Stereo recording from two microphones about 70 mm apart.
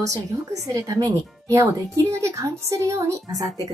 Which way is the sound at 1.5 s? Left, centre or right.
Right.